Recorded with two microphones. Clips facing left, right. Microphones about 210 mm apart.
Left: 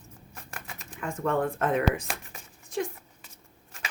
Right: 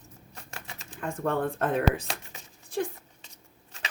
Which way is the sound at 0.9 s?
35° right (ahead or behind).